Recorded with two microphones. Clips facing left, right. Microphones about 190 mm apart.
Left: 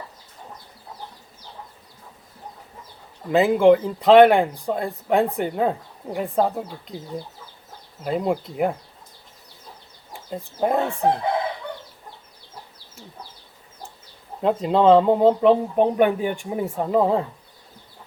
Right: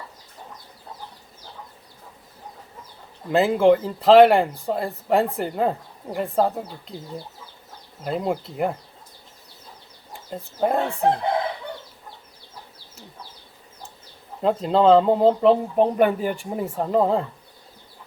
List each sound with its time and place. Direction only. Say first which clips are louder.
3.2 s speech: left 2 dB; centre (ahead or behind)
10.1 s speech: left 2 dB; centre (ahead or behind)
14.4 s speech: even; centre (ahead or behind)